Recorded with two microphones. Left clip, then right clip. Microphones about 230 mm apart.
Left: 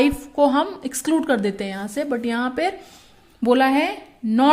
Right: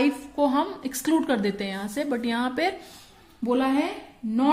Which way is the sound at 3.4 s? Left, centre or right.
Left.